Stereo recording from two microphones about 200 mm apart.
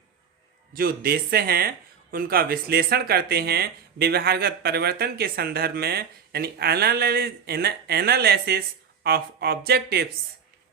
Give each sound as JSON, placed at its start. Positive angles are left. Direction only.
{"t": 0.7, "sound": "speech", "side_deg": -45}